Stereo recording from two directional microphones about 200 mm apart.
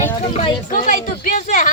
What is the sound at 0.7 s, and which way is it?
Speech, 40° left (ahead or behind).